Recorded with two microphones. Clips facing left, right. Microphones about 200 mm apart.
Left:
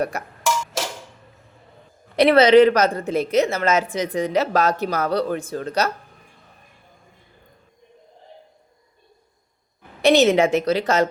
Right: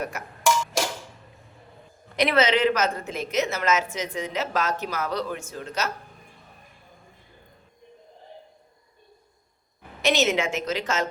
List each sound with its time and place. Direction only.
2.1 s speech: 30° left (ahead or behind)
10.0 s speech: 35° left (ahead or behind)